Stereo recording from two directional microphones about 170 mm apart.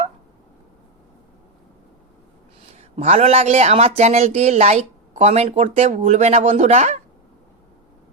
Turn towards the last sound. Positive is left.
turn(degrees=-45)  # may be behind; listen again after turning